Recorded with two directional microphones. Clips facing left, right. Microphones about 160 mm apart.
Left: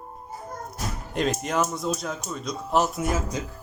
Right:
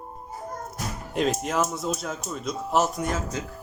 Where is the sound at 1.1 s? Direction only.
Centre (ahead or behind).